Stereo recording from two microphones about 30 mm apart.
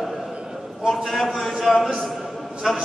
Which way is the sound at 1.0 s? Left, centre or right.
Centre.